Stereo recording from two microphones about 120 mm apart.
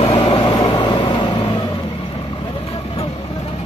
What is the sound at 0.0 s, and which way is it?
Vehicle, 50° left (ahead or behind).